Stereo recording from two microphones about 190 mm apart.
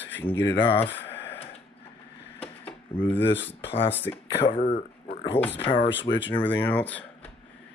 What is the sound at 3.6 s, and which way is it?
Speech, 70° left (ahead or behind).